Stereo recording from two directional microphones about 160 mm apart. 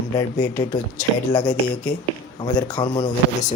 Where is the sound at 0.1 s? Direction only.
25° left (ahead or behind).